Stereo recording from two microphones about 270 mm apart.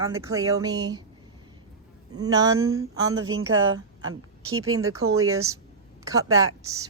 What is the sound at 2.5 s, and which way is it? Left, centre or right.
A woman's voice, right.